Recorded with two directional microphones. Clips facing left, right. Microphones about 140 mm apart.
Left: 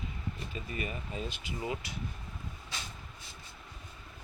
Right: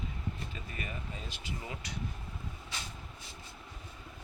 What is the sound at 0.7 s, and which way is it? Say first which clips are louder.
Speech: left 6 dB; 20° left (ahead or behind).